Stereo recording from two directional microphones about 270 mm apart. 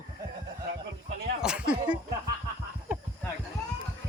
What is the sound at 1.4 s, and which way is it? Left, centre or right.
Speech, centre.